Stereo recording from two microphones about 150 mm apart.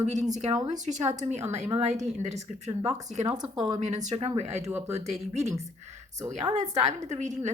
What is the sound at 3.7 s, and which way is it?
Speech, 50° right (ahead or behind).